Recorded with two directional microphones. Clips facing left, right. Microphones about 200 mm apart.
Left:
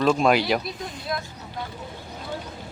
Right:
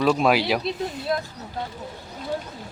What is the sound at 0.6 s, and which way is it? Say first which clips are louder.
Speech: right 6 dB; 30° right (ahead or behind).